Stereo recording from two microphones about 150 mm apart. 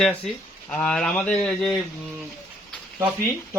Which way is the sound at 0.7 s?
5° left (ahead or behind).